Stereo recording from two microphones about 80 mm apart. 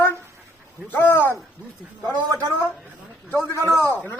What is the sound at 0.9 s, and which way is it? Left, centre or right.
Speech, left.